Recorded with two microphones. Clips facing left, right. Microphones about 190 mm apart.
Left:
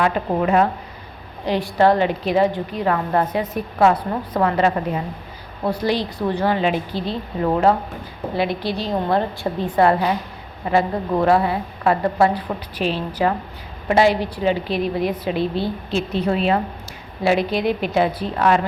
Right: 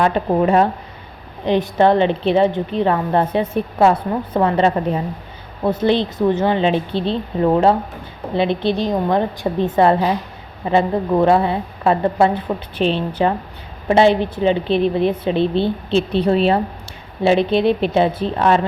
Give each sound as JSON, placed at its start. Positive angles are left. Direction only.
{"t": 0.0, "sound": "a woman's voice", "side_deg": -30}